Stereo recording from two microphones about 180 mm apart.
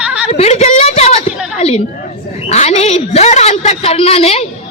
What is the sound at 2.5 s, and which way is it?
A woman's voice, 35° left (ahead or behind).